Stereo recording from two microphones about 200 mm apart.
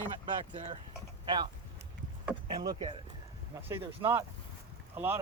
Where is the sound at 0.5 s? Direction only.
25° right (ahead or behind).